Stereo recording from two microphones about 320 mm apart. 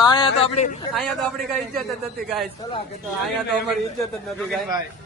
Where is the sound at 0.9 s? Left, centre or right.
Centre.